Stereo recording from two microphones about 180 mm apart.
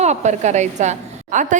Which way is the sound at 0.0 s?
40° right (ahead or behind).